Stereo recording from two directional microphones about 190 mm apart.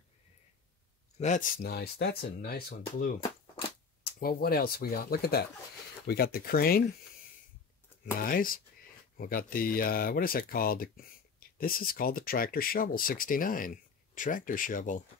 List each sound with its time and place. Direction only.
1.2 s speech: 45° left (ahead or behind)
8.0 s speech: 50° left (ahead or behind)